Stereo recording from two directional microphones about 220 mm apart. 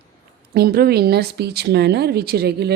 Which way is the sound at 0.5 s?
45° right (ahead or behind).